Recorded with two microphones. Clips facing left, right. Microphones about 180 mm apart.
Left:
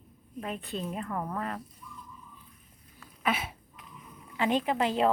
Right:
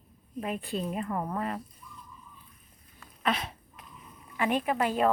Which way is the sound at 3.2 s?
5° left (ahead or behind).